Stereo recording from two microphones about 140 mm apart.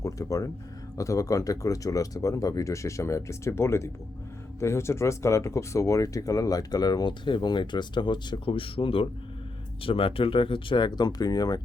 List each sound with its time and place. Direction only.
0.0 s speech: 25° left (ahead or behind)